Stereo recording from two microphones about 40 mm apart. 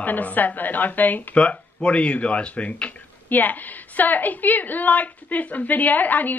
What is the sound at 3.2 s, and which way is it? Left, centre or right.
A woman's voice, left.